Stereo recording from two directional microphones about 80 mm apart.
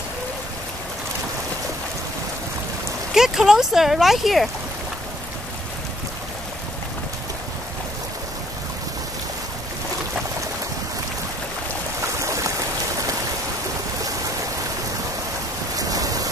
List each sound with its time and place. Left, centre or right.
3.2 s speech: centre
12.2 s boat: right
15.7 s rain: right